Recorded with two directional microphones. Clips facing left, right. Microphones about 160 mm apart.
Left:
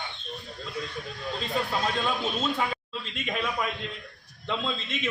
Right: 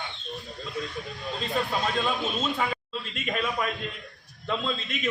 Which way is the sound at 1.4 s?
Centre (ahead or behind).